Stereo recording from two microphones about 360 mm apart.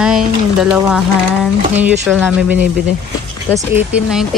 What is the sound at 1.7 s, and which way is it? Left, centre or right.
Speech, centre.